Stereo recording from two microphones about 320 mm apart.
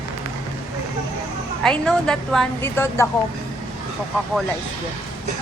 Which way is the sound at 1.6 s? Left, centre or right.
Centre.